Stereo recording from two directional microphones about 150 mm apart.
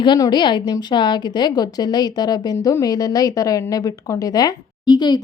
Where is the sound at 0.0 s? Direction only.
30° left (ahead or behind).